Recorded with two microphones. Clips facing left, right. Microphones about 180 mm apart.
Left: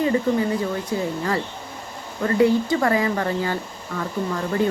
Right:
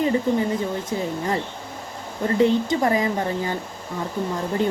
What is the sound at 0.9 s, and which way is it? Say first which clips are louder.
Speech: left 1 dB; 20° right (ahead or behind).